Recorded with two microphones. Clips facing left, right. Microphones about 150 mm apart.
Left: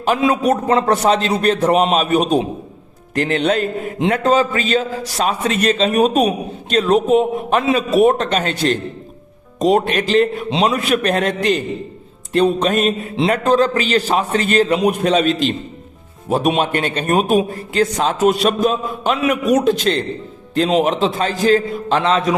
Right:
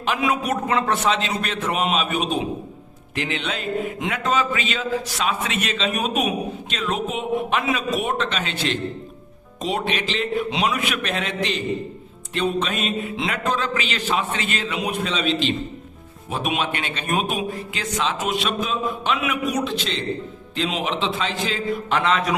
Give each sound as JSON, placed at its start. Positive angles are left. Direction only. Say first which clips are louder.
{"t": 0.0, "sound": "a man's voice", "louder": "left 7 dB", "side_deg": 35}
{"t": 10.5, "sound": "a man's voice", "louder": "left 7 dB", "side_deg": 30}
{"t": 21.8, "sound": "a man's voice", "louder": "left 4 dB", "side_deg": 30}